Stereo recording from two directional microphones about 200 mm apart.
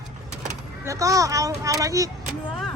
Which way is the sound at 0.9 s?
15° right (ahead or behind).